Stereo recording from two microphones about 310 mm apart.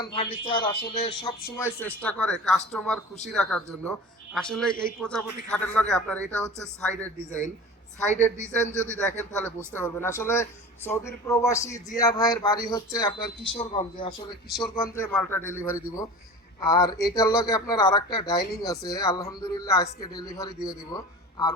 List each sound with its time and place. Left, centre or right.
0.0 s speech: centre
8.1 s speech: left
8.8 s speech: centre